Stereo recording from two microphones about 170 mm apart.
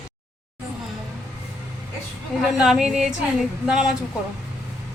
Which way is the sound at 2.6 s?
5° right (ahead or behind).